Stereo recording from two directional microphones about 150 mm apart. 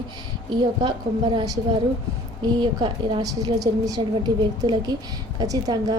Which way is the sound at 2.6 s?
30° right (ahead or behind).